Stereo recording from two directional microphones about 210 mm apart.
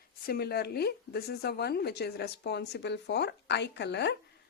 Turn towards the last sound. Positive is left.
turn(degrees=55)  # may be behind; listen again after turning